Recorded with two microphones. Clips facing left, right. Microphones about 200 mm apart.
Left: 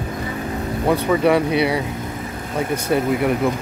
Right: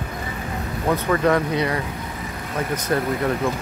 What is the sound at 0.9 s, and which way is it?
Speech, 10° left (ahead or behind).